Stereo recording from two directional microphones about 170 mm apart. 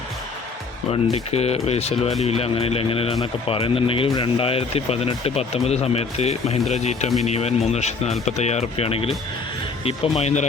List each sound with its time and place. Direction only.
1.1 s speech: 40° left (ahead or behind)